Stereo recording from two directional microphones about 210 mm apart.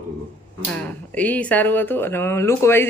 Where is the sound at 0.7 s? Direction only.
5° left (ahead or behind).